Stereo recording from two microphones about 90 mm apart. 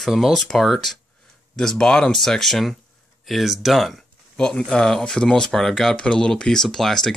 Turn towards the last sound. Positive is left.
turn(degrees=5)  # may be behind; listen again after turning